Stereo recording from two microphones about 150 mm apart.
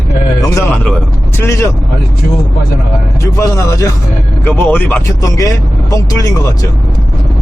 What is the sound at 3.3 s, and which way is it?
Speech, 20° left (ahead or behind).